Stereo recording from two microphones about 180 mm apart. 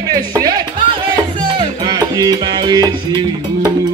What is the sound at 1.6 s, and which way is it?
Music, 20° right (ahead or behind).